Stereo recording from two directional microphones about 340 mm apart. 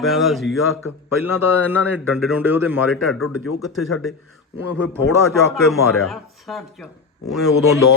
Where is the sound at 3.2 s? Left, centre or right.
Left.